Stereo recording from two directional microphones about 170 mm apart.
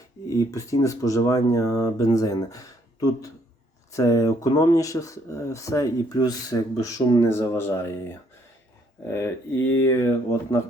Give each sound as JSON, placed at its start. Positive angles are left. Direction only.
{"t": 0.3, "sound": "speech", "side_deg": 20}
{"t": 9.0, "sound": "speech", "side_deg": 15}